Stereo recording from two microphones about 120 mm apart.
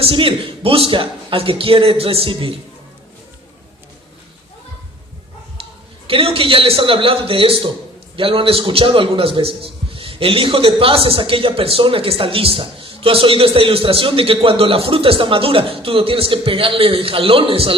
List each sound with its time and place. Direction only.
0.0 s a man's voice: 50° right (ahead or behind)
6.1 s a man's voice: 50° right (ahead or behind)